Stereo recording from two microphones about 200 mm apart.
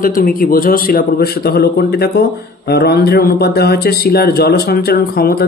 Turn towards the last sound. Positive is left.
turn(degrees=50)  # may be behind; listen again after turning